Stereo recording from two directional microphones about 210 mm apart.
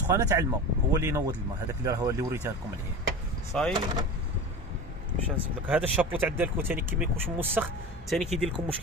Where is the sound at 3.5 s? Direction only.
5° left (ahead or behind).